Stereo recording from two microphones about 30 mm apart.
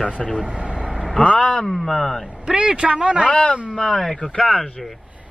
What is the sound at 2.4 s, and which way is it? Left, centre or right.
Speech, right.